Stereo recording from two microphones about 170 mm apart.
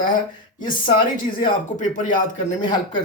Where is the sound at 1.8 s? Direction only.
45° left (ahead or behind).